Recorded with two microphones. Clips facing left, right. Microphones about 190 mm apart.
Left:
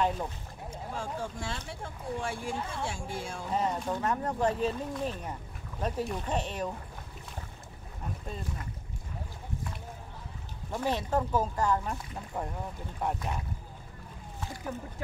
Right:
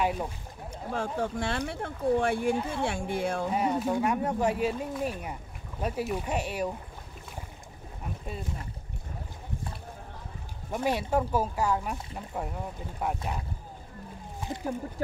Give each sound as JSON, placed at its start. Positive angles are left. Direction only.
{"t": 0.0, "sound": "speech", "side_deg": -10}
{"t": 0.7, "sound": "speech", "side_deg": -65}
{"t": 3.5, "sound": "speech", "side_deg": -10}
{"t": 10.7, "sound": "speech", "side_deg": -10}
{"t": 14.4, "sound": "a sound", "side_deg": -15}